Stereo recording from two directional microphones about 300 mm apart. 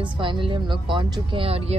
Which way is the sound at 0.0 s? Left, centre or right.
Centre.